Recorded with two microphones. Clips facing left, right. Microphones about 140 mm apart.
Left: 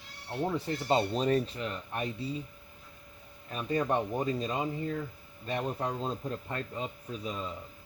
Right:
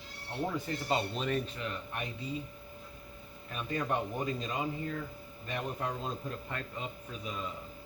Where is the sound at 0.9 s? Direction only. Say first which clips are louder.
Left 6 dB; 35° left (ahead or behind).